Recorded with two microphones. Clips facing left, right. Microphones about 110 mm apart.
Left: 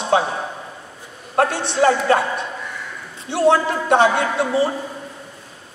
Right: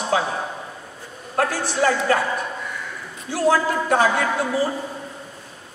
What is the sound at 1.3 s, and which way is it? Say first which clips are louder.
A man's voice: left 4 dB; 25° left (ahead or behind).